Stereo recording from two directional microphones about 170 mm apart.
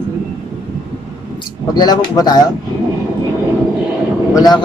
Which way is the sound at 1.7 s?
25° left (ahead or behind).